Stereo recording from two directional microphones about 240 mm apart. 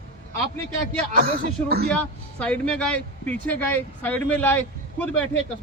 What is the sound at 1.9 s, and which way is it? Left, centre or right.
Speech, centre.